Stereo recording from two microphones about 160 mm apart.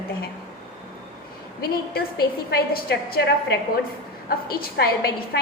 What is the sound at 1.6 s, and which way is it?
A woman's voice, 70° left (ahead or behind).